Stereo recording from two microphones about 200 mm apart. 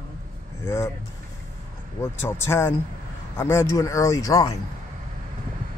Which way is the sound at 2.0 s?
10° left (ahead or behind).